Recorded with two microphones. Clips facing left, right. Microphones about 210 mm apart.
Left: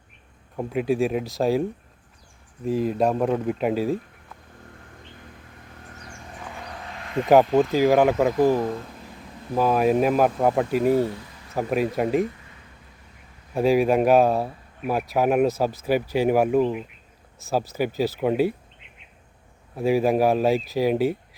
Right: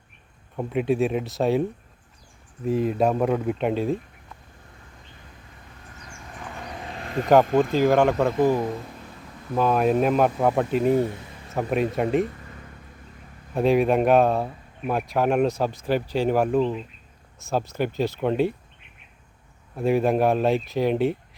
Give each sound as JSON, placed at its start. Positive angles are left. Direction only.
{"t": 0.5, "sound": "speech", "side_deg": 0}
{"t": 2.6, "sound": "speech", "side_deg": 0}
{"t": 6.4, "sound": "vehicle", "side_deg": 0}
{"t": 7.5, "sound": "speech", "side_deg": 5}
{"t": 12.2, "sound": "a sound", "side_deg": -50}
{"t": 13.5, "sound": "speech", "side_deg": 0}
{"t": 19.7, "sound": "speech", "side_deg": 5}